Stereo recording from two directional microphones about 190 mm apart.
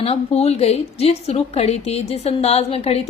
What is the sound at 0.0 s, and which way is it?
A woman's voice, 30° left (ahead or behind).